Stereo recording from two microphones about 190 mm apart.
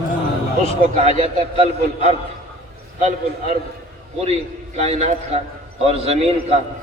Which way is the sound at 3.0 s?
40° right (ahead or behind).